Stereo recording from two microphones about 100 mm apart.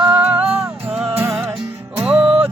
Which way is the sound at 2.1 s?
65° right (ahead or behind).